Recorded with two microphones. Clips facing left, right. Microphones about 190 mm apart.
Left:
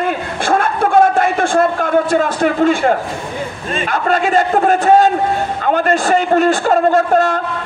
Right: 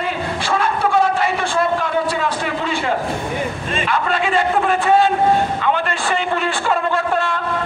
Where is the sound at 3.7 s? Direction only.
45° left (ahead or behind).